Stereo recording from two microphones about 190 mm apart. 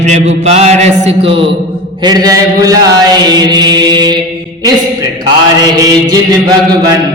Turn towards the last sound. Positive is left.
turn(degrees=-20)  # may be behind; listen again after turning